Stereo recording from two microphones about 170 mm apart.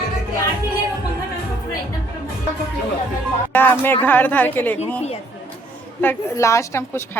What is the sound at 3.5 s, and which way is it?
A woman's voice, 10° left (ahead or behind).